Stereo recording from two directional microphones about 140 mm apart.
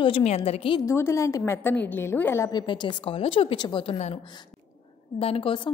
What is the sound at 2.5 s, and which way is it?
A woman's voice, 35° left (ahead or behind).